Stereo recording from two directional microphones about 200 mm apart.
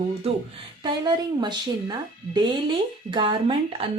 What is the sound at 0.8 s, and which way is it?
Speech, 20° right (ahead or behind).